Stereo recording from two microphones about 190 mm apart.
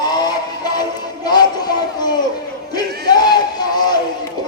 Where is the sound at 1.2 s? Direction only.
20° left (ahead or behind).